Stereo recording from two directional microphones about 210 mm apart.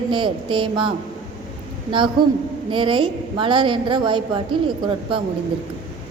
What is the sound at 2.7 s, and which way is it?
A woman's voice, 25° right (ahead or behind).